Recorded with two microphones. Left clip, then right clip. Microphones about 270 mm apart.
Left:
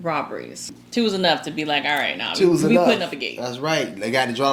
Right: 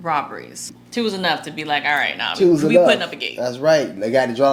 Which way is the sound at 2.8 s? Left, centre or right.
Right.